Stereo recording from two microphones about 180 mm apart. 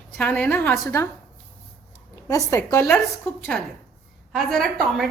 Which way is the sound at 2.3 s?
15° left (ahead or behind).